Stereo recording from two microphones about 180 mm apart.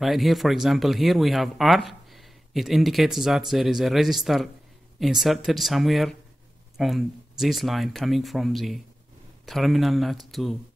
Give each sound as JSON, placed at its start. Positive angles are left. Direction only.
{"t": 0.0, "sound": "speech", "side_deg": 0}